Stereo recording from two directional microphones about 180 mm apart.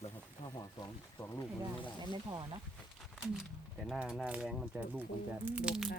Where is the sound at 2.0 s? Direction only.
25° right (ahead or behind).